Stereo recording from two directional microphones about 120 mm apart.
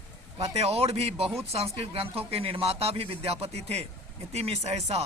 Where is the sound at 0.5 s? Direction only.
60° right (ahead or behind).